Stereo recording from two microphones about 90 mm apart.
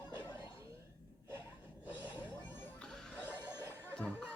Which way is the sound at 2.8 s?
10° left (ahead or behind).